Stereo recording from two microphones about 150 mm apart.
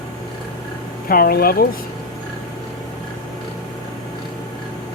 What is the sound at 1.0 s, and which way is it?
Speech, 80° left.